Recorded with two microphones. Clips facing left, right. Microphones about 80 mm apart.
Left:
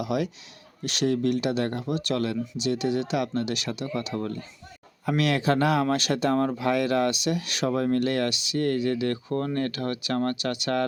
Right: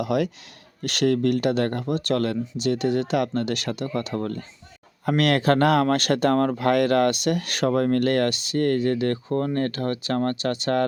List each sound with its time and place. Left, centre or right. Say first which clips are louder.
0.0 s speech: right 4 dB; right